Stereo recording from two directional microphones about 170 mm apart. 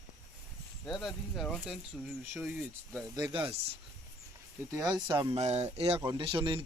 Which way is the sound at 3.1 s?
25° right (ahead or behind).